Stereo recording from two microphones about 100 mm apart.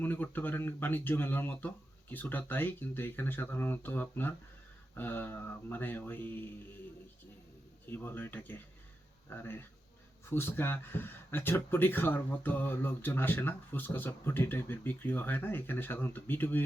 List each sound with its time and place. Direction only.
0.0 s speech: 20° left (ahead or behind)
7.9 s speech: 20° left (ahead or behind)